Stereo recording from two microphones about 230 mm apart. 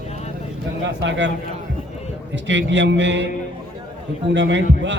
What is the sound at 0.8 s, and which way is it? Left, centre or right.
Speech, right.